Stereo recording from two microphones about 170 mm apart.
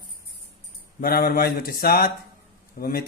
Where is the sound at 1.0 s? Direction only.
60° left (ahead or behind).